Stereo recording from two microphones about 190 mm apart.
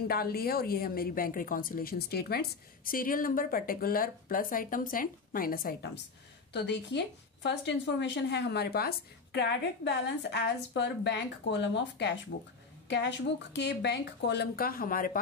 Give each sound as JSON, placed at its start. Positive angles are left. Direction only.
{"t": 0.1, "sound": "a woman's voice", "side_deg": 55}
{"t": 6.5, "sound": "a woman's voice", "side_deg": 65}
{"t": 13.5, "sound": "a woman's voice", "side_deg": 65}